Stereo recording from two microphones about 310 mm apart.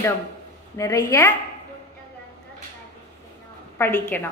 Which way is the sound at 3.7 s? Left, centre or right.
Centre.